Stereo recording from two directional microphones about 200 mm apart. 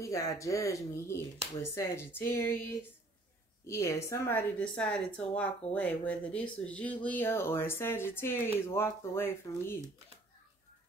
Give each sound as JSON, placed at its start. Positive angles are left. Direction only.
{"t": 0.0, "sound": "speech", "side_deg": 15}